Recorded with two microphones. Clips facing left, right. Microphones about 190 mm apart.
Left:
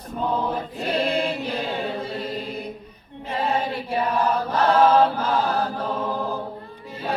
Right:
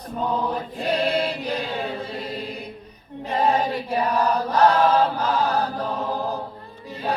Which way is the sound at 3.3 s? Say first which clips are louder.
Right 3 dB; 40° right (ahead or behind).